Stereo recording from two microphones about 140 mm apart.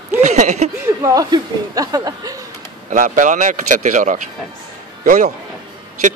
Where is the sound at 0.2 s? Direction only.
60° right (ahead or behind).